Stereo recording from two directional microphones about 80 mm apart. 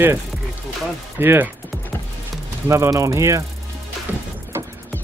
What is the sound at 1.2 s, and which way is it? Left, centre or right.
Speech, right.